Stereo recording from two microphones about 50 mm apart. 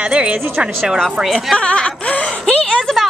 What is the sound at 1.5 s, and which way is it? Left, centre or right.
Speech, left.